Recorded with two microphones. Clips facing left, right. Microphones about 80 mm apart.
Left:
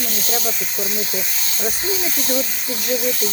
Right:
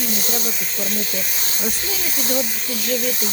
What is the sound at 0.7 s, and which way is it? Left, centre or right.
Speech, centre.